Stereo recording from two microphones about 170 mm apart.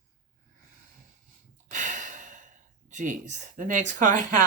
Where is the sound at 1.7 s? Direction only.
50° right (ahead or behind).